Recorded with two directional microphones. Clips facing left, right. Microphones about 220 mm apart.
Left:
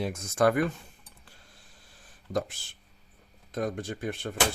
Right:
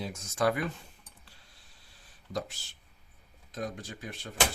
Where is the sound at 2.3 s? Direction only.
55° left (ahead or behind).